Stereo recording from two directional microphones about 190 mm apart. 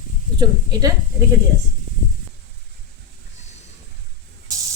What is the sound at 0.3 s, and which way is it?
Speech, 20° right (ahead or behind).